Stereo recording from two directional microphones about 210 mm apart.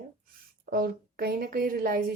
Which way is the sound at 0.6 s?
45° right (ahead or behind).